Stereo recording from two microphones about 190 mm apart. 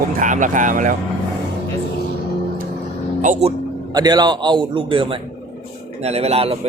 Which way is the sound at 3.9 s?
20° right (ahead or behind).